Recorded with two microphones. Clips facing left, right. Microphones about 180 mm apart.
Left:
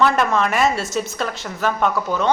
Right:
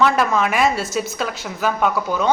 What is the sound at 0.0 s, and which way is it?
A woman's voice, centre (ahead or behind).